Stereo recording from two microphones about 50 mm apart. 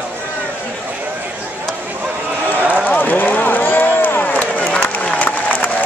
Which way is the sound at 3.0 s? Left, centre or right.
Left.